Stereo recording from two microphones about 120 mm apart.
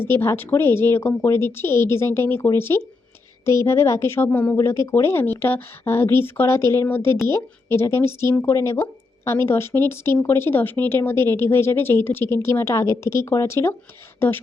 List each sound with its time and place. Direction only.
0.0 s speech: 20° left (ahead or behind)